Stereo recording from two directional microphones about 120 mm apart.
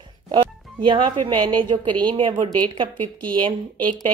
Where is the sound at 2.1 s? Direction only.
50° right (ahead or behind).